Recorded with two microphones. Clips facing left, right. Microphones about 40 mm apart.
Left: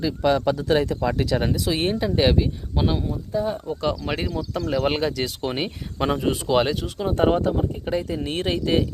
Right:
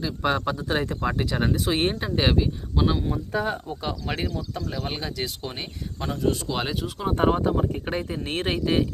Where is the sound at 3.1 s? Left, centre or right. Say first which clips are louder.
Left 1 dB; right.